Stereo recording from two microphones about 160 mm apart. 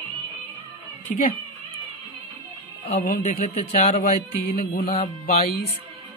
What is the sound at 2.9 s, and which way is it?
Speech, 60° left (ahead or behind).